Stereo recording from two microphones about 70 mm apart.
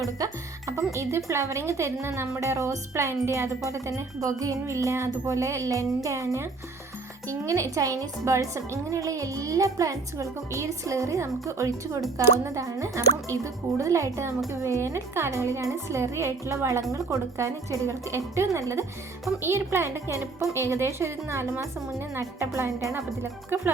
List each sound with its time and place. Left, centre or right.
0.2 s speech: right
0.9 s a woman's voice: right
2.4 s a woman's voice: right
23.0 s a woman's voice: right